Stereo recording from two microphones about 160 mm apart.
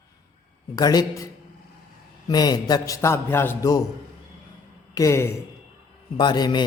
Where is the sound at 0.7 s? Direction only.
25° left (ahead or behind).